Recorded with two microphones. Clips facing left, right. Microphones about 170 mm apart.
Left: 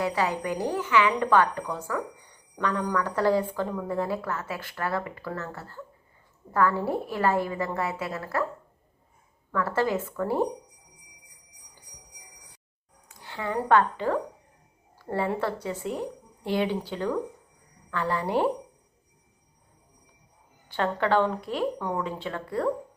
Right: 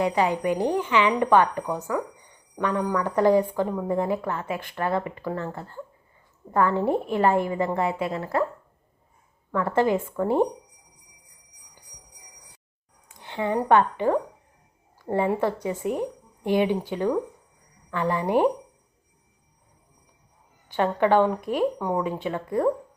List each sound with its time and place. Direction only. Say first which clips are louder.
0.0 s a woman's voice: right 4 dB; 20° right (ahead or behind)
9.5 s a woman's voice: right 4 dB; 20° right (ahead or behind)
13.1 s a woman's voice: right 6 dB; 20° right (ahead or behind)
20.7 s speech: right 4 dB; 15° right (ahead or behind)